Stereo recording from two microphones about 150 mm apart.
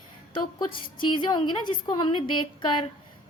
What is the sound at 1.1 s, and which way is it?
A woman's voice, 30° left (ahead or behind).